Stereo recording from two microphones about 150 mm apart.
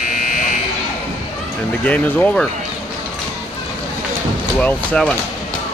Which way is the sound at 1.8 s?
10° left (ahead or behind).